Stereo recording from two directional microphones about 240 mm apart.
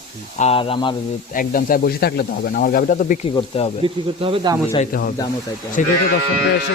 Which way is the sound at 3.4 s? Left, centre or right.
Left.